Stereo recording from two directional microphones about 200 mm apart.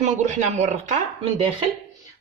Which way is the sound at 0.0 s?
35° right (ahead or behind).